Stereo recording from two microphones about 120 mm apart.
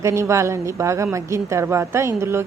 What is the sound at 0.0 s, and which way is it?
A woman's voice, 25° right (ahead or behind).